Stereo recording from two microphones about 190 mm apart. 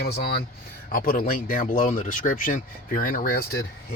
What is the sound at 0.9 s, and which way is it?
Speech, 45° left (ahead or behind).